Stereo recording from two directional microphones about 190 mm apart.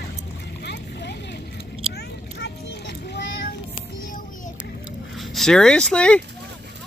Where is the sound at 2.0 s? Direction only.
60° left (ahead or behind).